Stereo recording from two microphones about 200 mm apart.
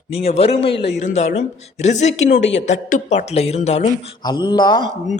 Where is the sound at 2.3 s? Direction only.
65° left (ahead or behind).